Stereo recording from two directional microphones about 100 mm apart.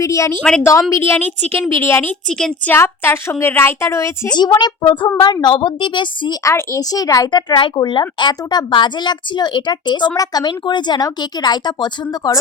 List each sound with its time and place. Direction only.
0.0 s a woman's voice: 30° left (ahead or behind)
4.4 s a woman's voice: 50° left (ahead or behind)
6.4 s a woman's voice: 30° left (ahead or behind)
7.3 s a woman's voice: 50° left (ahead or behind)